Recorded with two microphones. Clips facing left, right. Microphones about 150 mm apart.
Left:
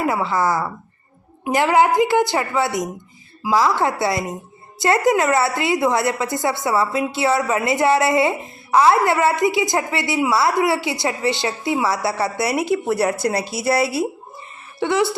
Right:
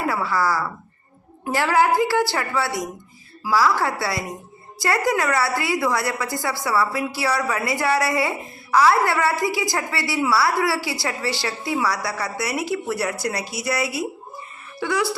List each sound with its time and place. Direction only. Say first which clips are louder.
0.0 s a woman's voice: left 3 dB; 20° left (ahead or behind)